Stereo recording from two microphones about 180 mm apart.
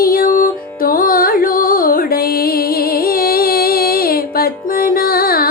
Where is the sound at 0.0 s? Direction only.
55° left (ahead or behind).